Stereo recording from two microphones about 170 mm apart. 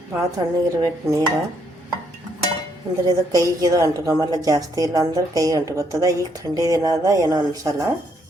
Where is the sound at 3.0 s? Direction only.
20° right (ahead or behind).